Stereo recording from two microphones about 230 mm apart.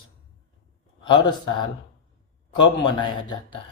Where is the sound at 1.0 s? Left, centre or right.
Centre.